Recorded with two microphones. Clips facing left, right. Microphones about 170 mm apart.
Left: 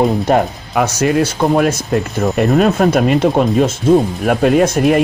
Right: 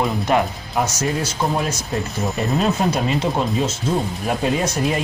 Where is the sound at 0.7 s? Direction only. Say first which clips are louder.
Left 8 dB; 65° left (ahead or behind).